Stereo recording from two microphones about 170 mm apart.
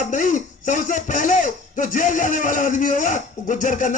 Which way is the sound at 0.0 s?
50° left (ahead or behind).